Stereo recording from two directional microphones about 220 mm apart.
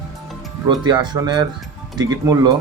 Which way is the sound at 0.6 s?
20° right (ahead or behind).